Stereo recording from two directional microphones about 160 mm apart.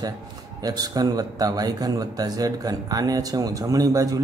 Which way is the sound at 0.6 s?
25° right (ahead or behind).